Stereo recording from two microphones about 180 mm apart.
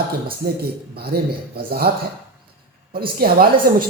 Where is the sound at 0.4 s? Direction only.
55° right (ahead or behind).